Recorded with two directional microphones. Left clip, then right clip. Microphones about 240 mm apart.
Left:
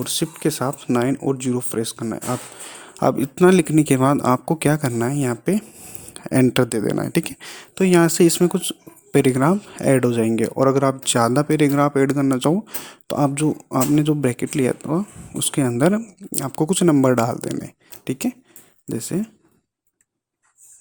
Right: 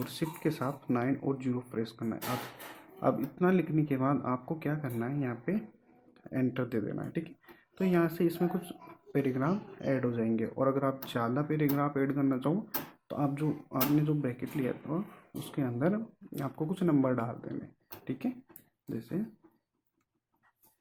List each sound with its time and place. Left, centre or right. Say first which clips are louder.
0.0 s speech: left 12 dB; left